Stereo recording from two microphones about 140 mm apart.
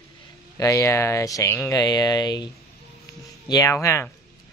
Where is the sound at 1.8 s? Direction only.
30° left (ahead or behind).